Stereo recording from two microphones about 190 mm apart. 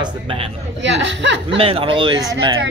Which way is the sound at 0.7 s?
70° right (ahead or behind).